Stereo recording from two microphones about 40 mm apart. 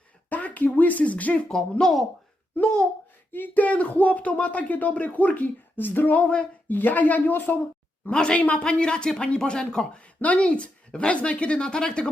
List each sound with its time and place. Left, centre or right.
0.3 s speech: left
1.5 s speech: centre
3.3 s speech: left
5.7 s a sound: left
6.1 s speech: left
6.7 s speech: left
8.1 s speech: left
8.4 s speech: left
8.6 s speech: left
10.2 s speech: left; by 12.0 s centre